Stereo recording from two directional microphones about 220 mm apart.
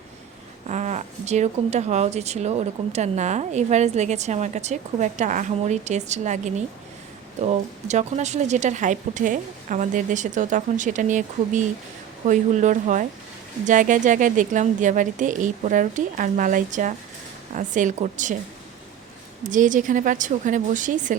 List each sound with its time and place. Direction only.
0.7 s speech: 30° right (ahead or behind)
19.5 s speech: 35° right (ahead or behind)